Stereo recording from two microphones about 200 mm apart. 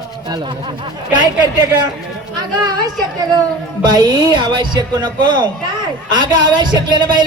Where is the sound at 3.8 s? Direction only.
20° right (ahead or behind).